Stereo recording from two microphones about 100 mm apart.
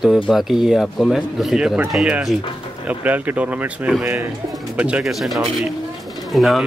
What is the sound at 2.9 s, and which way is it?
Speech, 15° right (ahead or behind).